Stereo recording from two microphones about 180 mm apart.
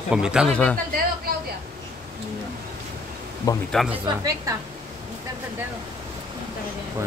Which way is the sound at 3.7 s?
5° right (ahead or behind).